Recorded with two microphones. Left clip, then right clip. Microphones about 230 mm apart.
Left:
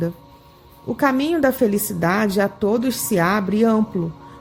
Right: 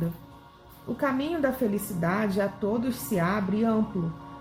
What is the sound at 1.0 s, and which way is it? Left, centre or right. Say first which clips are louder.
Speech: left 9 dB; left.